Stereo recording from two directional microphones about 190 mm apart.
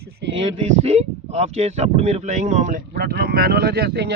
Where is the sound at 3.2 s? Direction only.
55° right (ahead or behind).